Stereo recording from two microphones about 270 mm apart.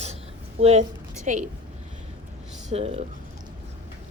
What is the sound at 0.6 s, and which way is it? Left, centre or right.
Speech, right.